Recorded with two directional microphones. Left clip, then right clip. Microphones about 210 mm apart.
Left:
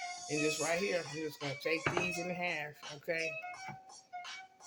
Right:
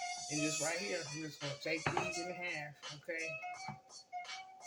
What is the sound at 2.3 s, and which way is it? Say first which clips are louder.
Speech: left 5 dB; 55° left (ahead or behind).